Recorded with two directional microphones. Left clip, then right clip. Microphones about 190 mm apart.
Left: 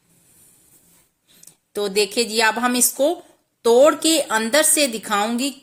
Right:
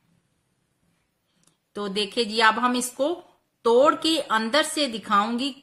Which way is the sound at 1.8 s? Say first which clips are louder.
Left 6 dB; 15° left (ahead or behind).